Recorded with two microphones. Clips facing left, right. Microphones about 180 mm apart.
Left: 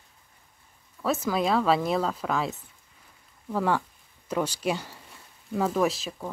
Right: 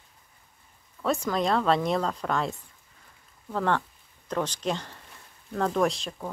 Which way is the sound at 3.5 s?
10° left (ahead or behind).